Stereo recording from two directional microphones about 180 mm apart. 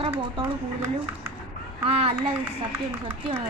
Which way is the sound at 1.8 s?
35° right (ahead or behind).